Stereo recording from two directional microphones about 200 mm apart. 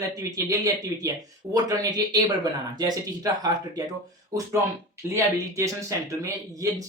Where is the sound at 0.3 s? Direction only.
15° right (ahead or behind).